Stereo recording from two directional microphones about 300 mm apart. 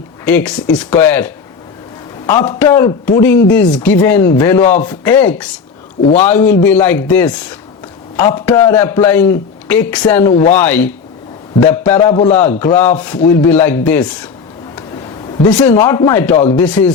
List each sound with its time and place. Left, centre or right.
0.3 s a man's voice: centre
15.4 s a man's voice: centre
16.4 s speech: left
16.6 s speech: centre